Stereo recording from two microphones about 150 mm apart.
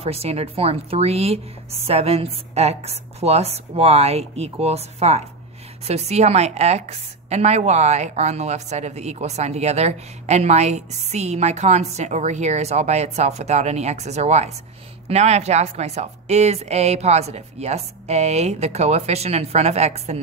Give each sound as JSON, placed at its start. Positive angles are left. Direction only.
{"t": 0.0, "sound": "a woman's voice", "side_deg": -40}